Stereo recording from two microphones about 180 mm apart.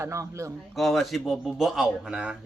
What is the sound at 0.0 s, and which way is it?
Speech, 15° right (ahead or behind).